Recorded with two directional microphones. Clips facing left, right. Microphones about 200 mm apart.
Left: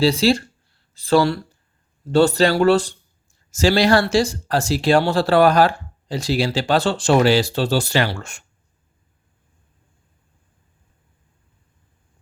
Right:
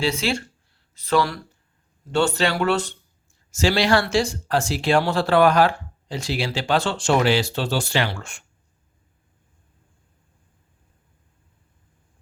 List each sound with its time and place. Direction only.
0.0 s speech: 35° left (ahead or behind)